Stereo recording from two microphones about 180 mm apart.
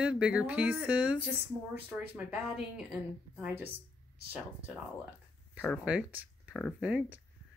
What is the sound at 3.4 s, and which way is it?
Speech, 10° right (ahead or behind).